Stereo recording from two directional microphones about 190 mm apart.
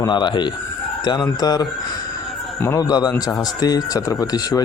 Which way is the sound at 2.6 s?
20° left (ahead or behind).